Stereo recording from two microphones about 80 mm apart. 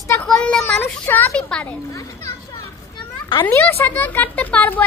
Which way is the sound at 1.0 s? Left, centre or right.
Left.